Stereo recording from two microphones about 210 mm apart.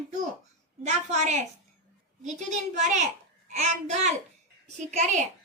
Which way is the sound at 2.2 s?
35° right (ahead or behind).